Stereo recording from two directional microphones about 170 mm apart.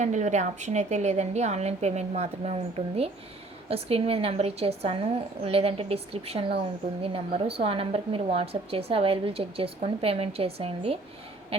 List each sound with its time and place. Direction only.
0.0 s a woman's voice: 45° right (ahead or behind)